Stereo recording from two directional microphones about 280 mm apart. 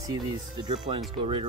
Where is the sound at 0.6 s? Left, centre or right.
Centre.